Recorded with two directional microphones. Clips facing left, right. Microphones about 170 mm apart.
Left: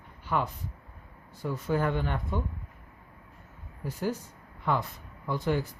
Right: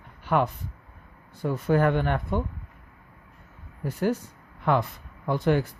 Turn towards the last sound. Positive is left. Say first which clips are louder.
# right 5 dB
turn(degrees=-65)  # may be behind; listen again after turning